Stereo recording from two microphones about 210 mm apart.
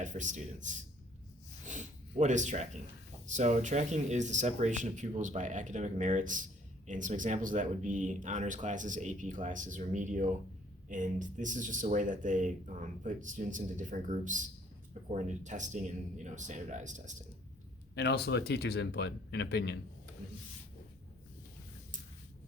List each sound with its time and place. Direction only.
0.0 s speech: 35° right (ahead or behind)
17.9 s speech: 50° left (ahead or behind)